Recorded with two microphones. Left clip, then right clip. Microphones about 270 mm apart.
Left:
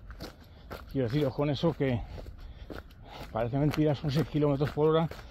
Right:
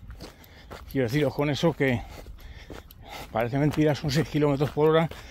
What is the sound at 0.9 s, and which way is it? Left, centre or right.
Speech, right.